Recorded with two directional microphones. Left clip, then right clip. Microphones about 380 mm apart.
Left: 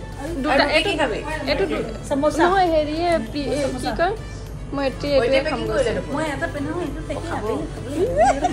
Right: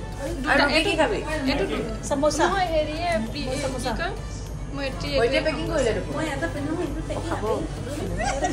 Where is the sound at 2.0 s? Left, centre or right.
Left.